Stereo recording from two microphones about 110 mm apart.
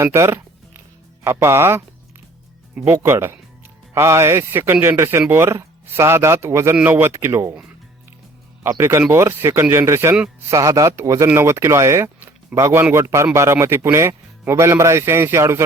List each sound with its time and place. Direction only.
0.0 s music: 25° right (ahead or behind)
1.2 s speech: 25° right (ahead or behind)
2.8 s speech: 25° right (ahead or behind)
8.6 s speech: 25° right (ahead or behind)